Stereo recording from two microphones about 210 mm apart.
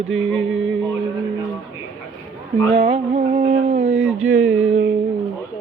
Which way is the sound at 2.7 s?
25° right (ahead or behind).